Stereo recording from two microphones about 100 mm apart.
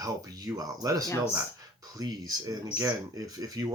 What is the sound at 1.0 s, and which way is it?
Speech, 25° left (ahead or behind).